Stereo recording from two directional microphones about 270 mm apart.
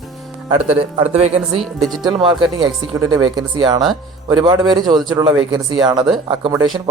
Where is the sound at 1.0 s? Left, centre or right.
Right.